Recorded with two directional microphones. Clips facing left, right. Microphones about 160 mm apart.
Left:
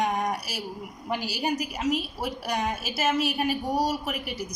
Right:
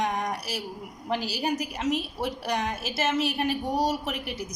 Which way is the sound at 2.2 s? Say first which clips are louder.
Right 1 dB; 5° left (ahead or behind).